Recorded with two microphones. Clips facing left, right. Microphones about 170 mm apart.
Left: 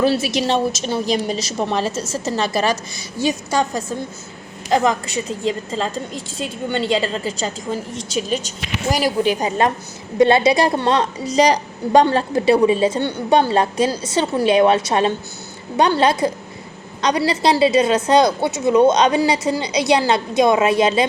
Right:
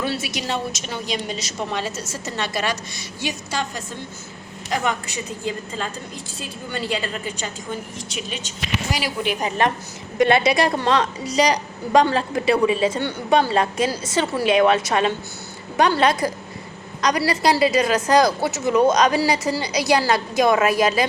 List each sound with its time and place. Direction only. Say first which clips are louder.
0.0 s a woman's voice: left 8 dB; 30° left (ahead or behind)
4.7 s a woman's voice: left 7 dB; 35° left (ahead or behind)
9.4 s a woman's voice: left 3 dB; 20° left (ahead or behind)